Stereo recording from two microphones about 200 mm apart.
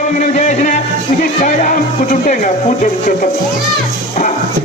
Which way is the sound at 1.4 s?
40° left (ahead or behind).